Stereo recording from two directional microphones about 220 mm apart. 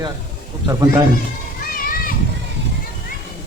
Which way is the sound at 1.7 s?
40° left (ahead or behind).